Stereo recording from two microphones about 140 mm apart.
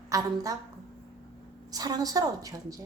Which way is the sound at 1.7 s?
25° right (ahead or behind).